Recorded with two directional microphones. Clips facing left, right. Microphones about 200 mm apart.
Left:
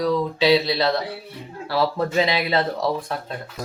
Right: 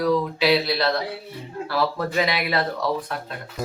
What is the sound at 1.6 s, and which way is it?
Speech, 30° left (ahead or behind).